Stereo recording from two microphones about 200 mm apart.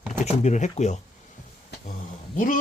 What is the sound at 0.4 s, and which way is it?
Speech, 35° left (ahead or behind).